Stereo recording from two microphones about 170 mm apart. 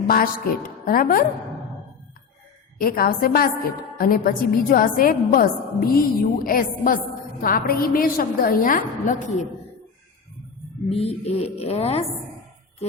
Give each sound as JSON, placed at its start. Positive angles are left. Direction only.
{"t": 0.9, "sound": "a woman's voice", "side_deg": 55}
{"t": 2.8, "sound": "a woman's voice", "side_deg": 60}
{"t": 10.8, "sound": "a woman's voice", "side_deg": 35}